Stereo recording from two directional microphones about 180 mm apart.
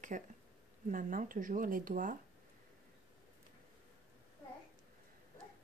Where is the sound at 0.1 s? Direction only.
45° right (ahead or behind).